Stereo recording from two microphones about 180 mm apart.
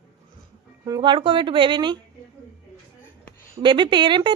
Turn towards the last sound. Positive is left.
turn(degrees=-25)  # may be behind; listen again after turning